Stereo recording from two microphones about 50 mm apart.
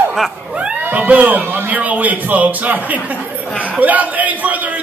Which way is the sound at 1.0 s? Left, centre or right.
Right.